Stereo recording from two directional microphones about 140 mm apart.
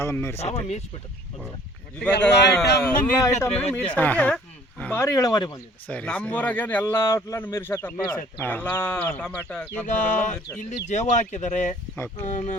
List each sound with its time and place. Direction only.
0.0 s speech: 20° left (ahead or behind)
0.3 s speech: 50° left (ahead or behind)
2.0 s a man's voice: 5° left (ahead or behind); by 5.5 s 30° left (ahead or behind)
5.9 s a man's voice: 10° left (ahead or behind)
9.8 s speech: 65° left (ahead or behind)